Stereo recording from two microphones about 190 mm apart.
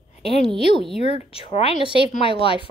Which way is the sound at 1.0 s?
30° left (ahead or behind).